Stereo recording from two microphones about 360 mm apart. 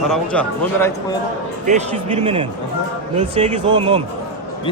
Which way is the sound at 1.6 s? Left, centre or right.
Centre.